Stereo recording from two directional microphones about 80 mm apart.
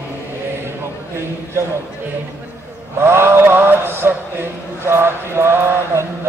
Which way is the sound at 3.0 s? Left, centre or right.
Right.